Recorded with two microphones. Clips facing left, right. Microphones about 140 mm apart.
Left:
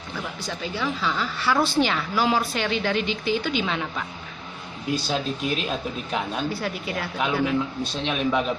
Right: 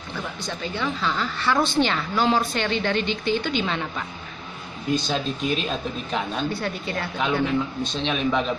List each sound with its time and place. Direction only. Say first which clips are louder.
0.4 s a woman's voice: even; 5° left (ahead or behind)
4.9 s a woman's voice: right 1 dB; 5° left (ahead or behind)